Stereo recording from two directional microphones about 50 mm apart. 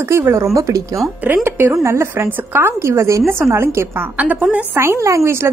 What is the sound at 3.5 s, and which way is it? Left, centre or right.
Speech, right.